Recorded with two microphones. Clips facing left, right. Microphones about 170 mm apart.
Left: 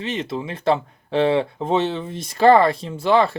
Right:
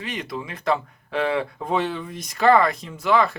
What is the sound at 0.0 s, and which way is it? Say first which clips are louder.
Speech: left 5 dB; 25° left (ahead or behind).